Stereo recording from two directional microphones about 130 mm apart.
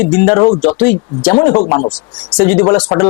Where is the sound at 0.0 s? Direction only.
20° left (ahead or behind).